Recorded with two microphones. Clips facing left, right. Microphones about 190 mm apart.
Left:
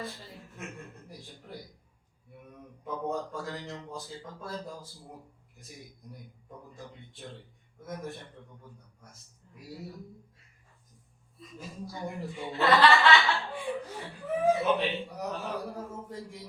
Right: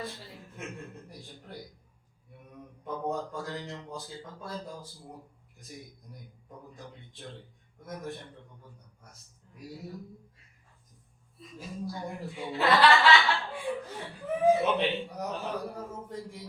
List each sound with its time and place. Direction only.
0.0 s a man's voice: centre (ahead or behind)
2.8 s speech: centre (ahead or behind)
11.4 s speech: centre (ahead or behind)
14.5 s speech: 20° right (ahead or behind)
14.8 s speech: centre (ahead or behind)